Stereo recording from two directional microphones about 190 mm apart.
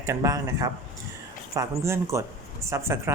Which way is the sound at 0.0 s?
15° right (ahead or behind).